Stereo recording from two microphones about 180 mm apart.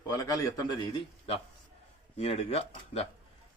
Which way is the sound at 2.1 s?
35° left (ahead or behind).